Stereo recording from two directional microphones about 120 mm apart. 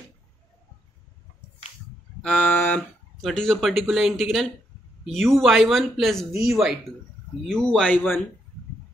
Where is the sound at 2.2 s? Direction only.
10° left (ahead or behind).